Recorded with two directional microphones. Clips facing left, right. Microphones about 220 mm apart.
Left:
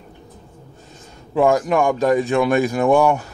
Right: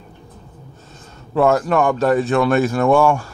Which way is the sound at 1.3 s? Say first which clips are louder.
Right 1 dB; 15° left (ahead or behind).